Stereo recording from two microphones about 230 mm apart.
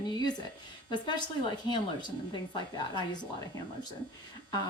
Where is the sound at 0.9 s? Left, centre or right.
Centre.